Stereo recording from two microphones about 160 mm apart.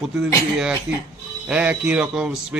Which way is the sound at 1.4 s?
10° right (ahead or behind).